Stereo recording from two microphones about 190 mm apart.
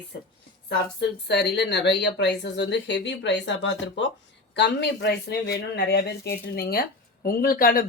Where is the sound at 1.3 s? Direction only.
65° left (ahead or behind).